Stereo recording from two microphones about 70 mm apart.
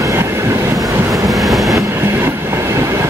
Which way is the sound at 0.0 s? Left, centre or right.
Right.